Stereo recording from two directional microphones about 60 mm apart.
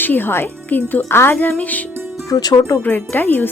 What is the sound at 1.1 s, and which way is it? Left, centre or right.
Speech, left.